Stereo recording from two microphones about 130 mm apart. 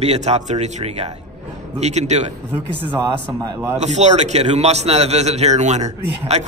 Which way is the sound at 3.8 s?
60° right (ahead or behind).